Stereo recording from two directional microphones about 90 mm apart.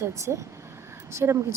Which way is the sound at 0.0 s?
35° right (ahead or behind).